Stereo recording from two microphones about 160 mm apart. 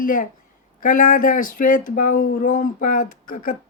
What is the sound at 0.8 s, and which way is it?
Speech, 55° left (ahead or behind).